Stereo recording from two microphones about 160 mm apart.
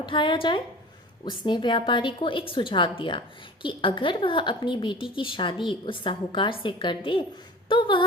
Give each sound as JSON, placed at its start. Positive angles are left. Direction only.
{"t": 0.0, "sound": "a woman's voice", "side_deg": 30}